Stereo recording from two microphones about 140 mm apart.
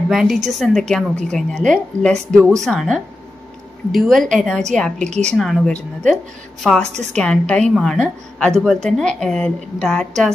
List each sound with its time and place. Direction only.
0.1 s a woman's voice: 5° right (ahead or behind)
6.9 s a woman's voice: 55° right (ahead or behind)
7.2 s a woman's voice: 5° left (ahead or behind)